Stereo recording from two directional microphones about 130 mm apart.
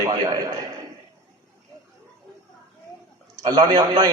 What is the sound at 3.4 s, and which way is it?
Speech, 30° right (ahead or behind).